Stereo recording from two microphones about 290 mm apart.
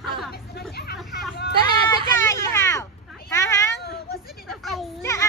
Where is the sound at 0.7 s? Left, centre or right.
Left.